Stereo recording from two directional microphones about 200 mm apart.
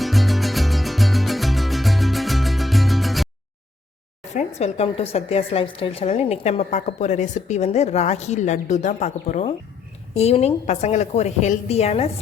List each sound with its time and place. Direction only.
0.0 s music: centre (ahead or behind)
4.4 s a woman's voice: 35° left (ahead or behind)